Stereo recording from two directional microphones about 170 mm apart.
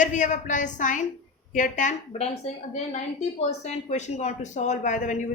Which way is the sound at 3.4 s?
40° left (ahead or behind).